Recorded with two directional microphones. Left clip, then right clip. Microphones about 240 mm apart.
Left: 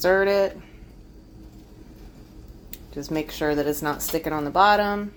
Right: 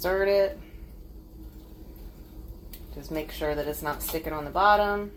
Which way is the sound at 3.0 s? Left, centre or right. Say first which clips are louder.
Left 5 dB; left.